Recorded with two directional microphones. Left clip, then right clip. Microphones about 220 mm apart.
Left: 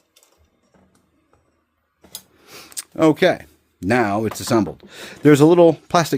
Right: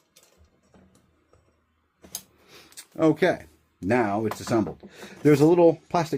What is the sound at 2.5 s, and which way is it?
Speech, 55° left (ahead or behind).